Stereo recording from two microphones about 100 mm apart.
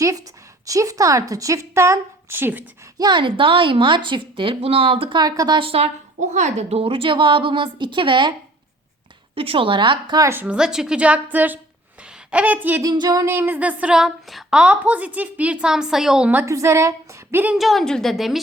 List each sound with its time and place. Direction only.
0.6 s a woman's voice: 35° right (ahead or behind)
3.0 s speech: 50° right (ahead or behind)
5.6 s speech: 80° right; by 8.3 s 55° right (ahead or behind)
9.3 s speech: 70° right (ahead or behind)
10.2 s a woman's voice: 30° right (ahead or behind)
10.4 s a woman's voice: 10° right (ahead or behind)
12.8 s a woman's voice: 40° right (ahead or behind)
13.2 s a woman's voice: 20° right (ahead or behind)
13.9 s a woman's voice: centre (ahead or behind)
14.6 s a woman's voice: 15° right (ahead or behind)
16.5 s a woman's voice: 30° right (ahead or behind)
17.5 s a woman's voice: centre (ahead or behind)